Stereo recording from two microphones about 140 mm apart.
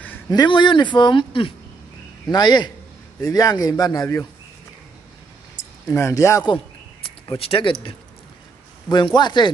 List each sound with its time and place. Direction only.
0.3 s speech: 30° left (ahead or behind)
5.9 s speech: 20° left (ahead or behind)
6.4 s a sound: 35° left (ahead or behind)
8.8 s speech: 30° left (ahead or behind)